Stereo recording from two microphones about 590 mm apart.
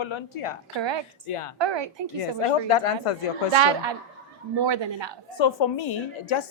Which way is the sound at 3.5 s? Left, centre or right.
Right.